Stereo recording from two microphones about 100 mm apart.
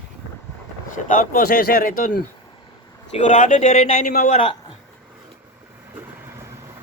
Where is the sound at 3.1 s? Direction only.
90° left.